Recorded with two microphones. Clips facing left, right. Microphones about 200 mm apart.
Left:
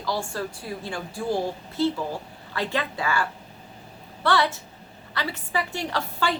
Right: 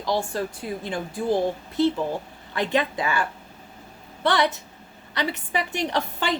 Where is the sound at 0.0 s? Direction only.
20° right (ahead or behind).